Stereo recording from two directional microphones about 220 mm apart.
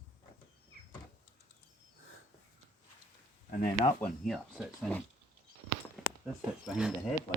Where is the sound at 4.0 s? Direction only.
Centre (ahead or behind).